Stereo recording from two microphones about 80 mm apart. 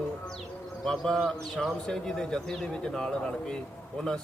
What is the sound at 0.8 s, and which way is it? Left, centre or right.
A man's voice, centre.